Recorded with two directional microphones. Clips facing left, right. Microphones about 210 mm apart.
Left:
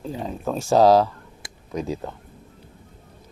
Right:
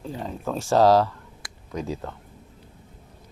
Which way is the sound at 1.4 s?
25° left (ahead or behind).